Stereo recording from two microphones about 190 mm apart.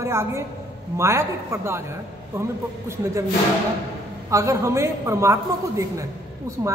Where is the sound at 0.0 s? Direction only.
15° right (ahead or behind).